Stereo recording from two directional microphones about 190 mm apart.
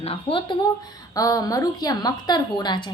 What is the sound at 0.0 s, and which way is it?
A woman's voice, 30° left (ahead or behind).